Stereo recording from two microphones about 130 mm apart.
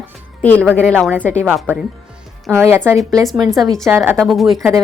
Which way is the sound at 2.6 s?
20° right (ahead or behind).